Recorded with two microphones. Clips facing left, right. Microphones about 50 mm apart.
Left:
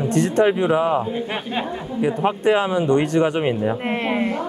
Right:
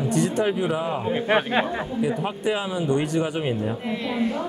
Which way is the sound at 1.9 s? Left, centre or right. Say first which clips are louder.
Left 8 dB; left.